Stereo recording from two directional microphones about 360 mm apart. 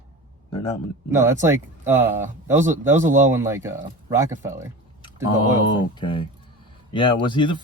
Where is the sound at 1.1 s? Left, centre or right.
Centre.